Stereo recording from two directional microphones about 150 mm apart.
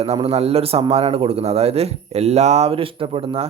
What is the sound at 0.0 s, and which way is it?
A man's voice, 40° right (ahead or behind).